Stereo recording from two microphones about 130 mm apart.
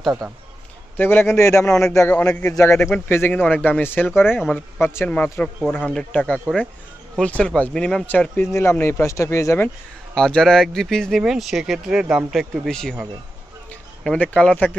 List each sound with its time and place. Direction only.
0.9 s speech: 15° left (ahead or behind)
1.7 s speech: 5° left (ahead or behind)
4.3 s speech: centre (ahead or behind)
4.8 s speech: 15° left (ahead or behind)
10.1 s speech: 5° left (ahead or behind)
14.0 s speech: 10° left (ahead or behind)